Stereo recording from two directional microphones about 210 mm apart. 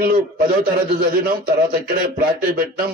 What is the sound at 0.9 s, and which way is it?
Speech, 45° right (ahead or behind).